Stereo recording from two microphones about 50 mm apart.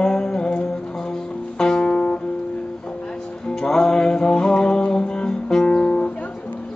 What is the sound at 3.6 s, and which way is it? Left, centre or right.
Music, centre.